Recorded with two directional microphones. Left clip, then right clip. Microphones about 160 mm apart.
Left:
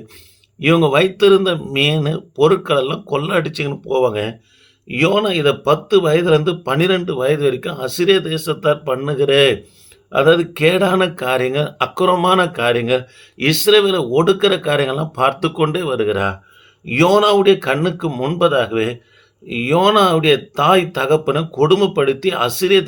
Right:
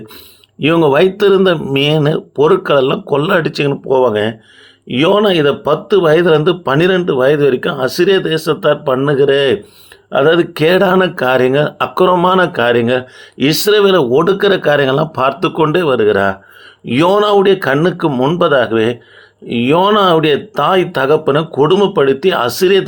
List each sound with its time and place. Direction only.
0.6 s speech: 30° right (ahead or behind)